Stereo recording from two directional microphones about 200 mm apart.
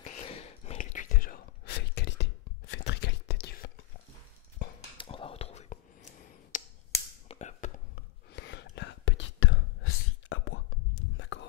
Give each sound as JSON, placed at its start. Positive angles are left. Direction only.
{"t": 0.0, "sound": "whispering", "side_deg": 30}
{"t": 4.9, "sound": "whispering", "side_deg": 25}
{"t": 7.2, "sound": "a sound", "side_deg": 35}
{"t": 8.3, "sound": "whispering", "side_deg": 60}